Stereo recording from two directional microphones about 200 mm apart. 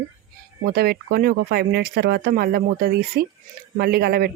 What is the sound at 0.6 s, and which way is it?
Speech, 50° right (ahead or behind).